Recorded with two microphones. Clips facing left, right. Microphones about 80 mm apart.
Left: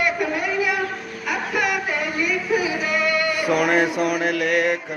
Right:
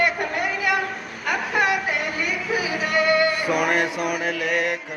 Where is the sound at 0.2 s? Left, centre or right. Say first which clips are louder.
Left 2 dB; right.